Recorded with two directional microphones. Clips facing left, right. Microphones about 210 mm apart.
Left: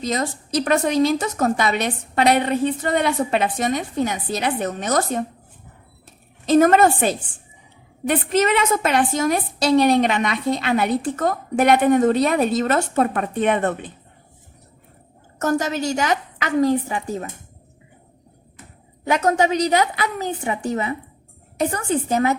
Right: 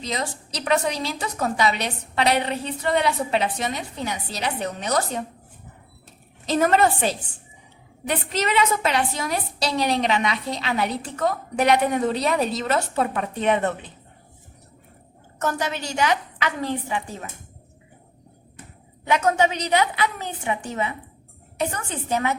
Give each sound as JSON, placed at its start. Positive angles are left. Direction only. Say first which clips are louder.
{"t": 0.0, "sound": "a woman's voice", "louder": "left 5 dB", "side_deg": 45}
{"t": 6.4, "sound": "a woman's voice", "louder": "left 5 dB", "side_deg": 50}
{"t": 15.4, "sound": "a woman's voice", "louder": "left 5 dB", "side_deg": 40}
{"t": 19.0, "sound": "a woman's voice", "louder": "left 2 dB", "side_deg": 40}